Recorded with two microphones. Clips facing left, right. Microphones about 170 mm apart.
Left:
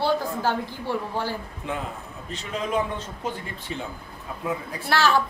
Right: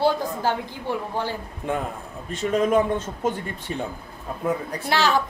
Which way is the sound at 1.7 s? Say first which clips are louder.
Right 5 dB; 50° right (ahead or behind).